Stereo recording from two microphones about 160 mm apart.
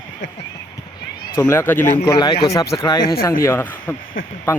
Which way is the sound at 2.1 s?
25° left (ahead or behind).